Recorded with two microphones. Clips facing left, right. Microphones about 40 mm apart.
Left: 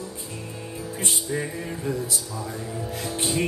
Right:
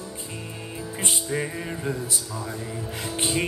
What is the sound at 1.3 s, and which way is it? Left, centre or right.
Music, right.